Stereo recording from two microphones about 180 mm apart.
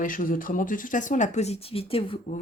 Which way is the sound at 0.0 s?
50° left (ahead or behind).